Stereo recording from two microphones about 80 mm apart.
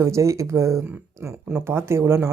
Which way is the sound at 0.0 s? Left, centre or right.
Right.